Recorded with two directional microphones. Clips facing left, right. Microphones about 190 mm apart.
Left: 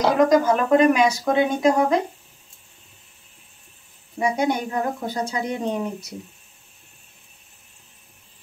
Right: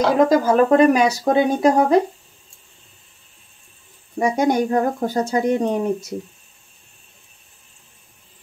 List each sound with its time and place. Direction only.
0.3 s speech: 35° right (ahead or behind)
4.2 s speech: 45° right (ahead or behind)